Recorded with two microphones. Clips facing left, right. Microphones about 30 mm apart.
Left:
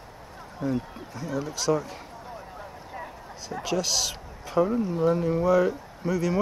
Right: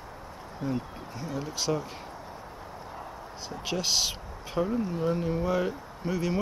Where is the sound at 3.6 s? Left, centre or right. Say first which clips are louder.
Left 1 dB; centre.